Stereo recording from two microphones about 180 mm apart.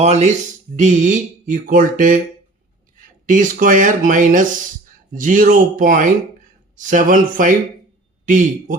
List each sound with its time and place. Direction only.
0.0 s a man's voice: 40° right (ahead or behind)
3.2 s speech: 45° right (ahead or behind)